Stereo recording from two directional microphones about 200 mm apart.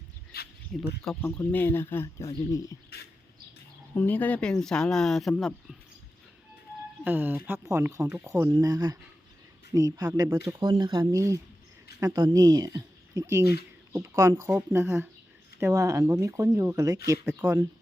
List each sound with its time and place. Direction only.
0.3 s a sound: 50° left (ahead or behind)
0.7 s speech: centre (ahead or behind)
1.4 s speech: 15° left (ahead or behind)
3.9 s speech: 10° left (ahead or behind)
7.0 s speech: 10° right (ahead or behind)
13.4 s speech: 55° left (ahead or behind)
13.9 s speech: 15° right (ahead or behind)